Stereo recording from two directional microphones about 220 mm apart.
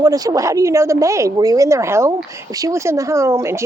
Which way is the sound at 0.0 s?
15° right (ahead or behind).